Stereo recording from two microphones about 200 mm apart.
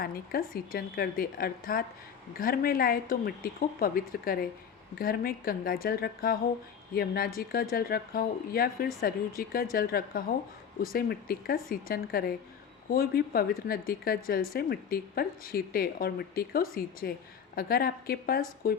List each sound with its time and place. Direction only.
0.0 s speech: 45° left (ahead or behind)